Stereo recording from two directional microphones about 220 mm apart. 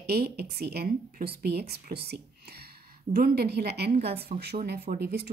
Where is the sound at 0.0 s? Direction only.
45° right (ahead or behind).